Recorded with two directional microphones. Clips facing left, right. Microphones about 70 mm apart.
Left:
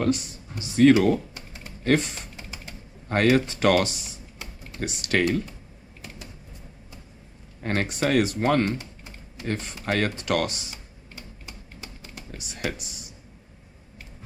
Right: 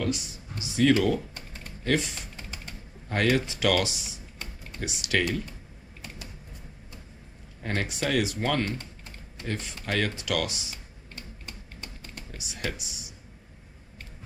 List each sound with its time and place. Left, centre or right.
0.0 s speech: left
2.3 s a sound: centre
3.1 s speech: left
7.6 s speech: left
11.1 s typewriter: centre
12.4 s speech: left